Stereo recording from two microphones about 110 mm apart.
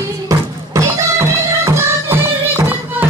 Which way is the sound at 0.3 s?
30° right (ahead or behind).